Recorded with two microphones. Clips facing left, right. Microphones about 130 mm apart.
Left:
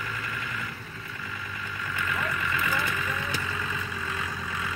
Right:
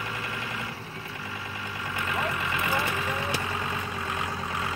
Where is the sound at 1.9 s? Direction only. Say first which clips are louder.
Right 1 dB; 25° right (ahead or behind).